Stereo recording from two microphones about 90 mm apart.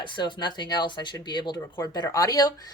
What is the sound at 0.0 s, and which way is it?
Speech, 65° left (ahead or behind).